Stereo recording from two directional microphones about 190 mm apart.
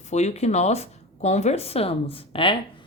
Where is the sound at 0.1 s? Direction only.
35° left (ahead or behind).